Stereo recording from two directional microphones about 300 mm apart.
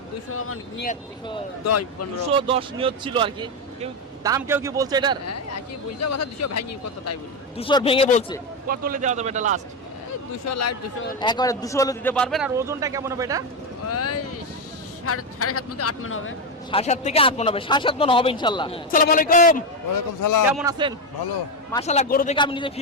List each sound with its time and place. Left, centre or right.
0.3 s speech: left
1.6 s speech: left
2.2 s speech: centre
5.2 s speech: left
7.5 s a man's voice: centre
8.6 s a man's voice: right
10.4 s speech: left
11.2 s a man's voice: centre
13.8 s speech: left
16.7 s a man's voice: left
18.9 s a man's voice: left
20.5 s a man's voice: centre
21.8 s a man's voice: left